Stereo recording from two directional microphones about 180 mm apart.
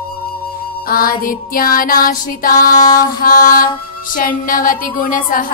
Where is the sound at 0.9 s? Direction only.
50° left (ahead or behind).